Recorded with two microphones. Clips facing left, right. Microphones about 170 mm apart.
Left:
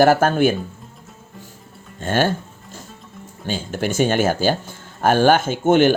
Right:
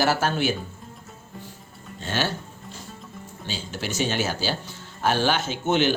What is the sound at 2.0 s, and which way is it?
Speech, 50° left (ahead or behind).